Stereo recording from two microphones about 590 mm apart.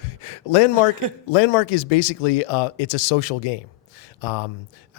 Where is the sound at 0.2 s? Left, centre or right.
Left.